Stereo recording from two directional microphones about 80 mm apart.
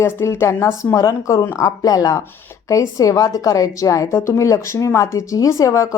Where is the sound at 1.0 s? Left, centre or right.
Left.